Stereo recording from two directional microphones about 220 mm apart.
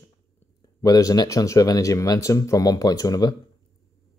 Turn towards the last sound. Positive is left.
turn(degrees=15)  # may be behind; listen again after turning